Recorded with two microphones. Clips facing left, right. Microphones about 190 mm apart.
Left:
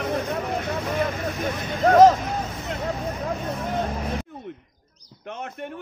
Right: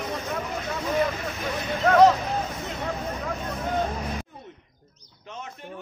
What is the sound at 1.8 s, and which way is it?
Speech, 45° left (ahead or behind).